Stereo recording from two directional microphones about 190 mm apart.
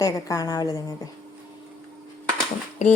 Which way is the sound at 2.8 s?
35° left (ahead or behind).